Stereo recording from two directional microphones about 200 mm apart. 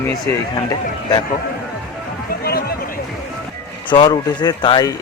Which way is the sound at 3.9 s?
20° left (ahead or behind).